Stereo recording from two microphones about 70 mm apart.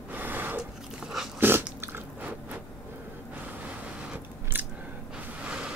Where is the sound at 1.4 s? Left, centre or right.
Right.